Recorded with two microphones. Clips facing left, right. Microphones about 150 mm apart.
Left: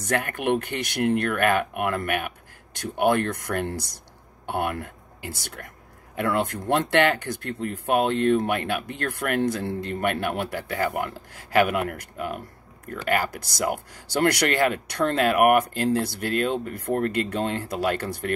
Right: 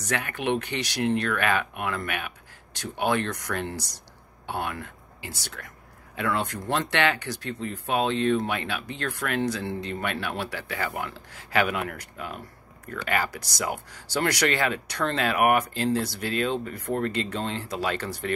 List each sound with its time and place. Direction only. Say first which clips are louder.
0.0 s speech: left 3 dB; 50° left (ahead or behind)